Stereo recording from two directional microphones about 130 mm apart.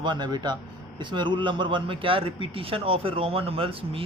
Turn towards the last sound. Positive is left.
turn(degrees=-45)  # may be behind; listen again after turning